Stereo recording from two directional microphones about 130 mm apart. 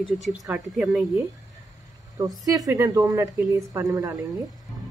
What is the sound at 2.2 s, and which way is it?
Speech, 25° right (ahead or behind).